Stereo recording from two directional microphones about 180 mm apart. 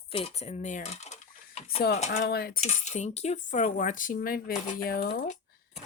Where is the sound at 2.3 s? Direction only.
60° left (ahead or behind).